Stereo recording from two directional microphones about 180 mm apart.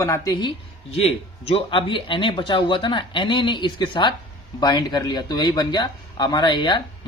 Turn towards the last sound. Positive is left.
turn(degrees=25)  # may be behind; listen again after turning